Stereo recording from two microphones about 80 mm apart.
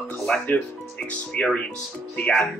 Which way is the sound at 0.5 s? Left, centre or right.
Centre.